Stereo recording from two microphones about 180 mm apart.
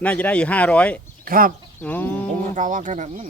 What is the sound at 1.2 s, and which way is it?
Speech, 50° right (ahead or behind).